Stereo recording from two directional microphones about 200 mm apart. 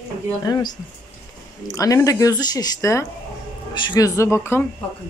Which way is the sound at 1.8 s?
15° left (ahead or behind).